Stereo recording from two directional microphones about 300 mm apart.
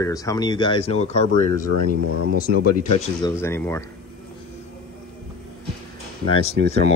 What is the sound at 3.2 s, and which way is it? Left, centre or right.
Speech, centre.